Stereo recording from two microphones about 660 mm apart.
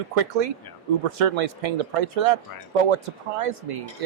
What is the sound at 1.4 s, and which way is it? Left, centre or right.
Speech, right.